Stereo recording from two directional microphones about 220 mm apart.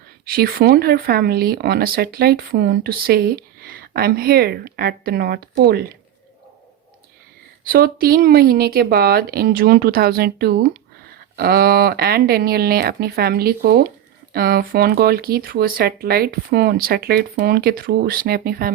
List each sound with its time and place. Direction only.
0.3 s speech: 45° right (ahead or behind)
7.6 s speech: 40° right (ahead or behind)